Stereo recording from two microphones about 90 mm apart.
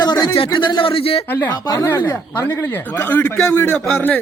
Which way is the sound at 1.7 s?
35° left (ahead or behind).